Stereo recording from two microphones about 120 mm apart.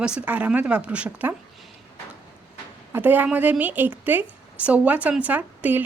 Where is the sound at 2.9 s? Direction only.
15° right (ahead or behind).